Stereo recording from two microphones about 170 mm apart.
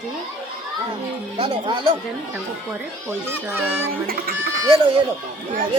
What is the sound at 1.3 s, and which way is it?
Speech, 30° right (ahead or behind).